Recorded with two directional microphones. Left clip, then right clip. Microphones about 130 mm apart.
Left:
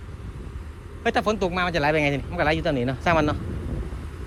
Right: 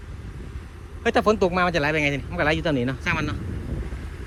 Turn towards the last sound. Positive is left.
turn(degrees=25)  # may be behind; listen again after turning